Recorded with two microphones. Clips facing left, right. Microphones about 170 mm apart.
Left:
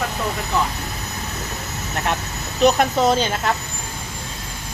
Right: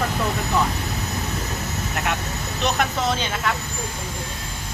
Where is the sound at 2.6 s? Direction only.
40° left (ahead or behind).